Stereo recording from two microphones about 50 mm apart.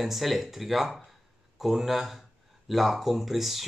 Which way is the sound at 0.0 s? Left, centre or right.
Centre.